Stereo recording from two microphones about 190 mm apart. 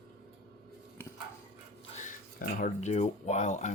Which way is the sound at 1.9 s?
40° left (ahead or behind).